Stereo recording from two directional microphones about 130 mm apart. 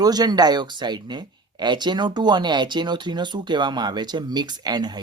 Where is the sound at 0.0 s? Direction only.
30° right (ahead or behind).